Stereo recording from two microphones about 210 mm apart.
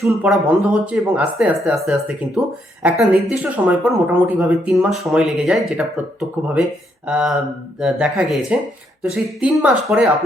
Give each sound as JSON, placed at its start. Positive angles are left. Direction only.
{"t": 0.0, "sound": "speech", "side_deg": -5}